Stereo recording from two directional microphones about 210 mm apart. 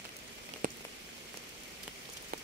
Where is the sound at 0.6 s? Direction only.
40° right (ahead or behind).